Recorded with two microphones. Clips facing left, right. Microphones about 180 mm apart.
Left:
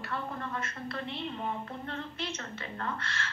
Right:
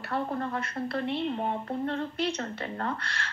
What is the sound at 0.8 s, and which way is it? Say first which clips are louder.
A woman's voice: right 10 dB; 40° right (ahead or behind).